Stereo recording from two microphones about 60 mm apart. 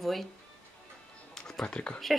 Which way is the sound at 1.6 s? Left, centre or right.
Centre.